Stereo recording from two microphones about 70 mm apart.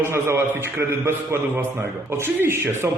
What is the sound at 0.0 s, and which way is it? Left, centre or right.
A man's voice, right.